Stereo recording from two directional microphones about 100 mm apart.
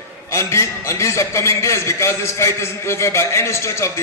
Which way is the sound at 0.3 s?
30° left (ahead or behind).